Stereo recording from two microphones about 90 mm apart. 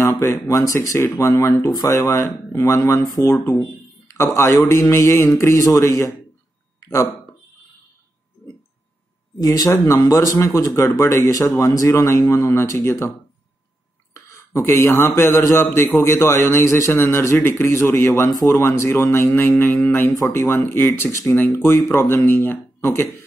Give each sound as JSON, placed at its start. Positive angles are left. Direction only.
{"t": 0.0, "sound": "speech", "side_deg": 30}
{"t": 9.4, "sound": "speech", "side_deg": 45}
{"t": 14.1, "sound": "a man's voice", "side_deg": 30}